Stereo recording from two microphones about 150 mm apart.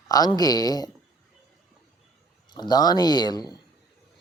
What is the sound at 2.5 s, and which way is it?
A man's voice, 30° left (ahead or behind).